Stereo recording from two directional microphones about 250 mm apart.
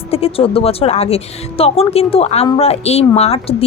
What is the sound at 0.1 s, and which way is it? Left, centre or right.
Speech, left.